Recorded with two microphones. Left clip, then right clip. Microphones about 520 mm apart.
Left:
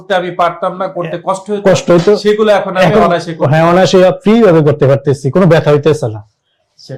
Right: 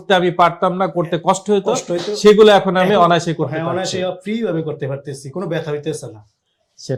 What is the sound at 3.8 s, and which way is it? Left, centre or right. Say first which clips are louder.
Speech: left 14 dB; left.